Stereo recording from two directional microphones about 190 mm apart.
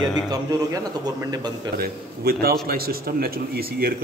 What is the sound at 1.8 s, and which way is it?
Speech, 55° right (ahead or behind).